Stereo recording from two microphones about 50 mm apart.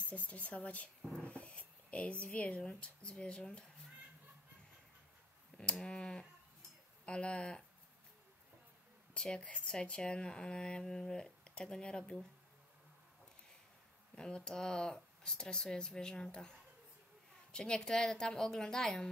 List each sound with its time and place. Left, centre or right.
0.3 s speech: left
5.6 s speech: centre
9.1 s speech: centre
14.1 s speech: centre